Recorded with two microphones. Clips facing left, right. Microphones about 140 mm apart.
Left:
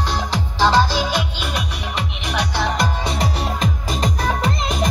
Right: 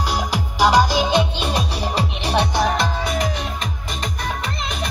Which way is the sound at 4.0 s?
35° left (ahead or behind).